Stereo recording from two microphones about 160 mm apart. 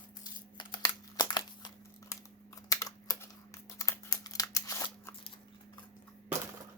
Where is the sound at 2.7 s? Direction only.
25° left (ahead or behind).